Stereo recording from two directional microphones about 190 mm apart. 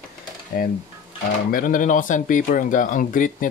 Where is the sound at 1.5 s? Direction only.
45° left (ahead or behind).